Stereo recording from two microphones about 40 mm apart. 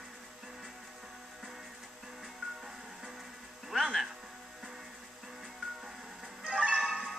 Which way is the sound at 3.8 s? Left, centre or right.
Centre.